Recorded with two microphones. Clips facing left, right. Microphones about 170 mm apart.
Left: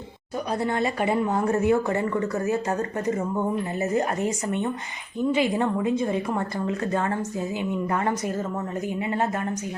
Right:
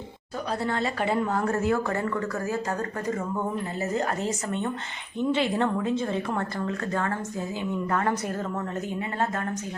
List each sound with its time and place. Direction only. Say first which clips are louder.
0.6 s a woman's voice: left 3 dB; 15° left (ahead or behind)
3.9 s a woman's voice: left 3 dB; 15° left (ahead or behind)